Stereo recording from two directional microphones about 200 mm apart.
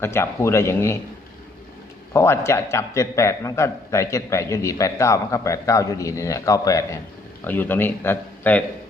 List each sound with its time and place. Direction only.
0.0 s a man's voice: 10° left (ahead or behind)
2.1 s a man's voice: 15° left (ahead or behind)